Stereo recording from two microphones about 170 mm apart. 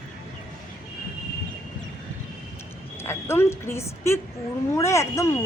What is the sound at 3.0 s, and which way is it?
Speech, 15° left (ahead or behind).